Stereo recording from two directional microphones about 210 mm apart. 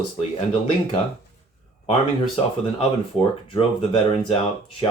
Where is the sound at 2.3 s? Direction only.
25° left (ahead or behind).